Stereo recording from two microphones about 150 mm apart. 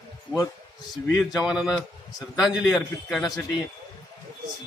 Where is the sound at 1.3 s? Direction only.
5° right (ahead or behind).